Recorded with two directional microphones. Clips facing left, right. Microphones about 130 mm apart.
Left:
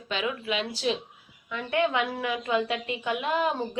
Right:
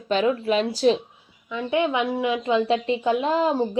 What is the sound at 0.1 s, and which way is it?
Speech, 40° right (ahead or behind).